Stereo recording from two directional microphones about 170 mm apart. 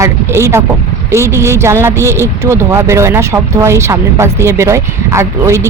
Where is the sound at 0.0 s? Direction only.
15° right (ahead or behind).